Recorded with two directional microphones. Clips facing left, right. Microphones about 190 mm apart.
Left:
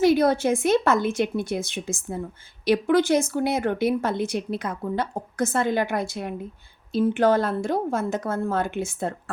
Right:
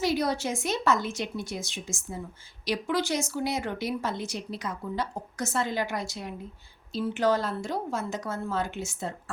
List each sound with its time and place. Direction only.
0.0 s a woman's voice: 55° left (ahead or behind)